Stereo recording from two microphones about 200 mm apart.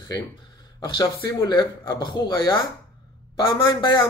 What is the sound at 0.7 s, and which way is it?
Speech, 20° left (ahead or behind).